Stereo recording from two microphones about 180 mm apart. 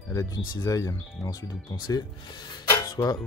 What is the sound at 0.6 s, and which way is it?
Speech, 20° left (ahead or behind).